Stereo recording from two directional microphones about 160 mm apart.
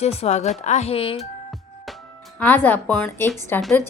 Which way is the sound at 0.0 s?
40° left (ahead or behind).